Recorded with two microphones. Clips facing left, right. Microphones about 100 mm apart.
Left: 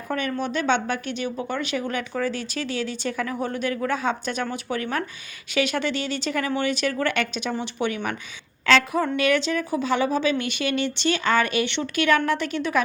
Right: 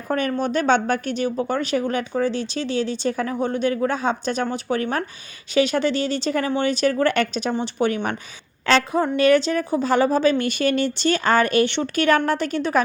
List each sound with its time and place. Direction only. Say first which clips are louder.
0.1 s speech: right 4 dB; 40° right (ahead or behind)